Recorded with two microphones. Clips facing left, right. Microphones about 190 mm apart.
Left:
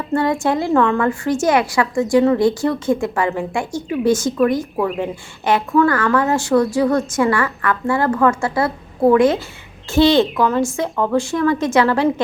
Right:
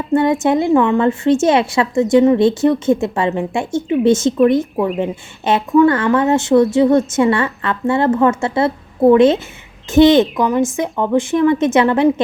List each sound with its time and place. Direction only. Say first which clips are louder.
0.1 s a woman's voice: right 4 dB; 20° right (ahead or behind)
5.5 s a woman's voice: right 3 dB; 20° right (ahead or behind)